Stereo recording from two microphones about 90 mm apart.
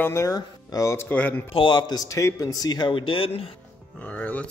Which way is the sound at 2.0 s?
35° left (ahead or behind).